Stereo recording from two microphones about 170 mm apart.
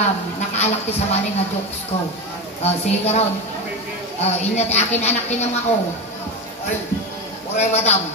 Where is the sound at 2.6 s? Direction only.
40° left (ahead or behind).